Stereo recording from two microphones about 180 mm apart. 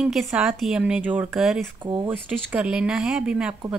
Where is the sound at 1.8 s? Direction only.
25° right (ahead or behind).